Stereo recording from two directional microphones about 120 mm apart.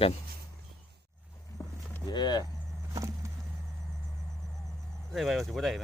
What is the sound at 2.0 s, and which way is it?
Speech, 35° left (ahead or behind).